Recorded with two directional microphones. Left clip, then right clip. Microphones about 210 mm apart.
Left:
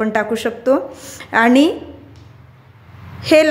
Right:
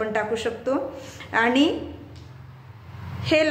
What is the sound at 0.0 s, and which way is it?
A woman's voice, 50° left (ahead or behind).